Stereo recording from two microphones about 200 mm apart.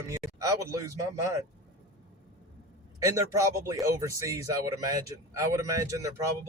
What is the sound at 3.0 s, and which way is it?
Speech, 15° right (ahead or behind).